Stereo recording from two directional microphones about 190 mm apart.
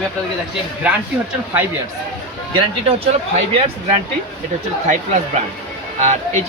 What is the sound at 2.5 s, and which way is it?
Speech, 25° right (ahead or behind).